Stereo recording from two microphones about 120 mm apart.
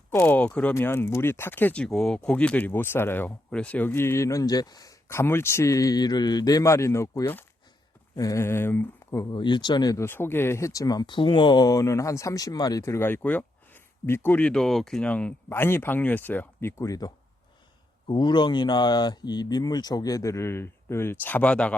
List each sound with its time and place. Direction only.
0.1 s speech: 15° left (ahead or behind); by 4.9 s 30° left (ahead or behind)
5.0 s speech: 20° left (ahead or behind)
9.3 s speech: 40° left (ahead or behind)
18.1 s speech: 40° left (ahead or behind); by 21.8 s 10° left (ahead or behind)